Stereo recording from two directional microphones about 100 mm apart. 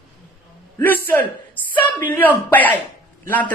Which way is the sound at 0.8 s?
20° left (ahead or behind).